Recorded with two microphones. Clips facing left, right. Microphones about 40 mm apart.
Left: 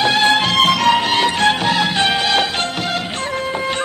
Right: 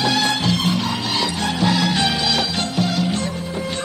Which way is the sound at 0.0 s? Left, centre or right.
Left.